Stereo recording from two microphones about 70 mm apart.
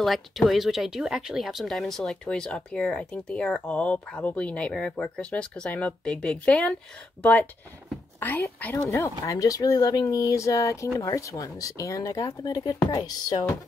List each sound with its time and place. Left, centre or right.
0.0 s speech: centre
8.2 s speech: left
8.9 s speech: left
12.3 s speech: left
12.9 s music: left